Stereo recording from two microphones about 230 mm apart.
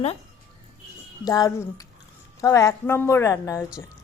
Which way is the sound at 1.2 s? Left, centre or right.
Centre.